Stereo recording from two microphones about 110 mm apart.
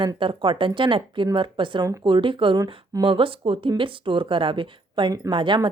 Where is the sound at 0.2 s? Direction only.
50° right (ahead or behind).